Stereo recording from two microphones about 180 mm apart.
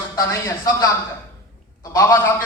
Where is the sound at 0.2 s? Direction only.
15° left (ahead or behind).